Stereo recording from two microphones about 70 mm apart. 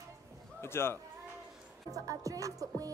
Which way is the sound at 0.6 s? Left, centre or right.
Left.